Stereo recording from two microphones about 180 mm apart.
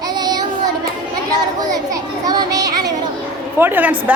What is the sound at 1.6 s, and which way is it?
A child's voice, 20° right (ahead or behind).